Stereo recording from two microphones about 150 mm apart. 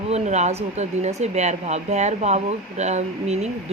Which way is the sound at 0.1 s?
50° right (ahead or behind).